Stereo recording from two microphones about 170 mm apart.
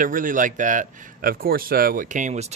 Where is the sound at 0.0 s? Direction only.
50° right (ahead or behind).